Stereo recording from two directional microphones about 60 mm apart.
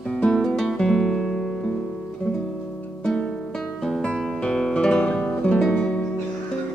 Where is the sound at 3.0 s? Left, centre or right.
Centre.